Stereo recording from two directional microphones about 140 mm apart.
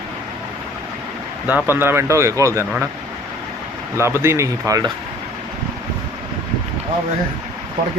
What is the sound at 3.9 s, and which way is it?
Speech, 20° right (ahead or behind).